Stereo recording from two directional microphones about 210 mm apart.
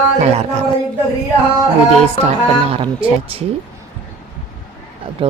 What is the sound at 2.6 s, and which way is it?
Speech, 25° right (ahead or behind).